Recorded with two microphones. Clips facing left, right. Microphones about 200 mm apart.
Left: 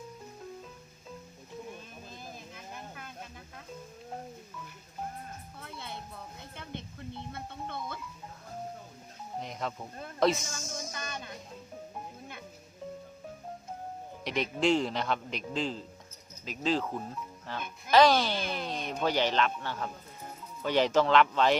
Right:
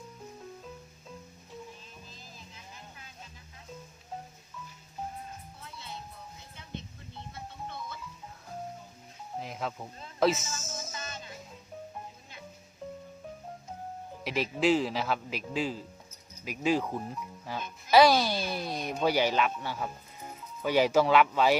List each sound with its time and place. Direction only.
1.7 s music: 55° left (ahead or behind)
5.5 s music: 55° left (ahead or behind)
9.4 s music: 5° right (ahead or behind)
10.2 s speech: 5° right (ahead or behind)
10.6 s music: 5° right (ahead or behind)
10.9 s music: 55° left (ahead or behind)
14.3 s speech: 5° right (ahead or behind)